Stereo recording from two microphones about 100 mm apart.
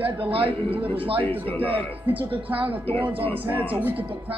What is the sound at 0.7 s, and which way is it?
Speech, 65° right (ahead or behind).